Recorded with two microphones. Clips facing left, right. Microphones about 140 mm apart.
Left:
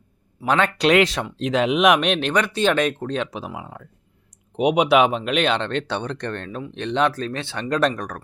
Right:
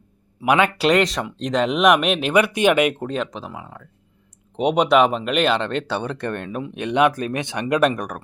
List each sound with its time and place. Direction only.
0.4 s speech: 10° right (ahead or behind)
0.9 s speech: centre (ahead or behind)
3.2 s speech: 10° left (ahead or behind); by 8.2 s 10° right (ahead or behind)